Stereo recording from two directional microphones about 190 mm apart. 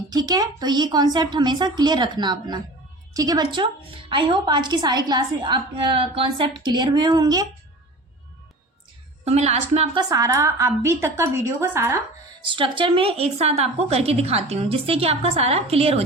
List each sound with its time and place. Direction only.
0.1 s a woman's voice: 20° right (ahead or behind)
9.2 s a woman's voice: 35° right (ahead or behind)
10.0 s a woman's voice: 20° right (ahead or behind)
12.4 s a woman's voice: 25° right (ahead or behind)